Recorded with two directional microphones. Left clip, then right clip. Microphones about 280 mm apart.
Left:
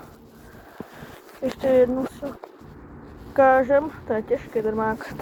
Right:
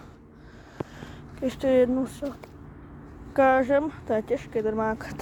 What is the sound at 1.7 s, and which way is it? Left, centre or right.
Speech, right.